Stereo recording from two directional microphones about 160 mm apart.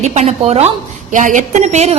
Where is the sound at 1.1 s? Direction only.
55° right (ahead or behind).